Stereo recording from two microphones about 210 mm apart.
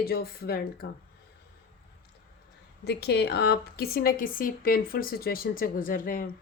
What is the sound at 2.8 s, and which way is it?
Speech, 50° left (ahead or behind).